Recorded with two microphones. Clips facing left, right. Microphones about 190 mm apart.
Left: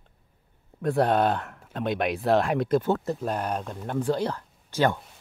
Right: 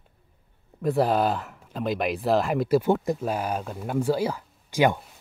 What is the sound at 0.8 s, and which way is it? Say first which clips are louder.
Speech: even; centre (ahead or behind).